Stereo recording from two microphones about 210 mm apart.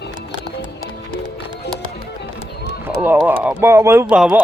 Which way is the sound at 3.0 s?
10° right (ahead or behind).